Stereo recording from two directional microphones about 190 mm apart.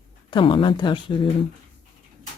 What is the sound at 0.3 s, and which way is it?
Speech, 25° left (ahead or behind).